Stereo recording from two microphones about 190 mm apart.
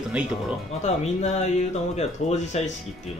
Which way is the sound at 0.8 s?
35° left (ahead or behind).